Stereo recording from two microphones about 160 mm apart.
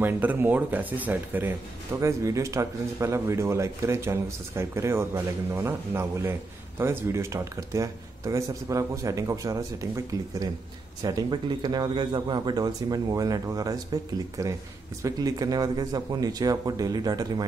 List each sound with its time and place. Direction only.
0.0 s speech: 10° right (ahead or behind)